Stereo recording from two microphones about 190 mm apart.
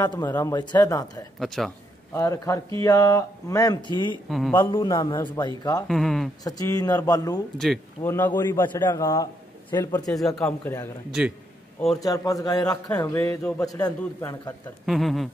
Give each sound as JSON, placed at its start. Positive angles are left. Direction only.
{"t": 0.0, "sound": "speech", "side_deg": 20}
{"t": 1.4, "sound": "speech", "side_deg": 0}
{"t": 2.1, "sound": "a man's voice", "side_deg": 15}
{"t": 4.3, "sound": "speech", "side_deg": 0}
{"t": 4.7, "sound": "speech", "side_deg": 20}
{"t": 5.9, "sound": "speech", "side_deg": 0}
{"t": 6.4, "sound": "speech", "side_deg": 20}
{"t": 7.5, "sound": "a man's voice", "side_deg": 0}
{"t": 11.1, "sound": "speech", "side_deg": -5}
{"t": 12.0, "sound": "a man's voice", "side_deg": 20}
{"t": 14.9, "sound": "speech", "side_deg": 0}